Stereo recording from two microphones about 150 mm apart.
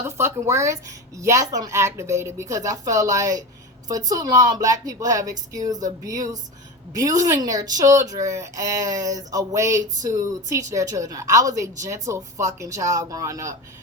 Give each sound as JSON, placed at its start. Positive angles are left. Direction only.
{"t": 0.2, "sound": "a woman's voice", "side_deg": -20}